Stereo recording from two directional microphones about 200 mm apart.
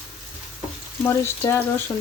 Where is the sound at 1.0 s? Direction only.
15° left (ahead or behind).